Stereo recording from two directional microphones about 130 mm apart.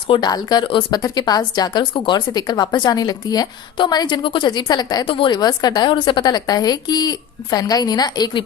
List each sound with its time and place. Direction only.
0.1 s a woman's voice: 30° left (ahead or behind)